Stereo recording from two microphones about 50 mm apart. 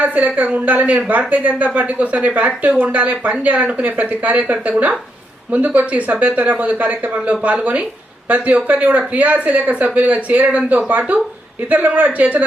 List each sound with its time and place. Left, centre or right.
0.0 s speech: right